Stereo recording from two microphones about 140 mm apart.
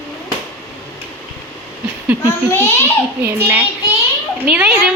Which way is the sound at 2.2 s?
20° left (ahead or behind).